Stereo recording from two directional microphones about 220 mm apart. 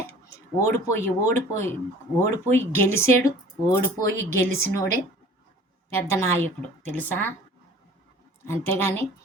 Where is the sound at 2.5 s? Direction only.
10° left (ahead or behind).